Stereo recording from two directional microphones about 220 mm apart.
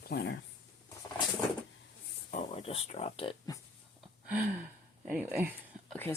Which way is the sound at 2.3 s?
25° left (ahead or behind).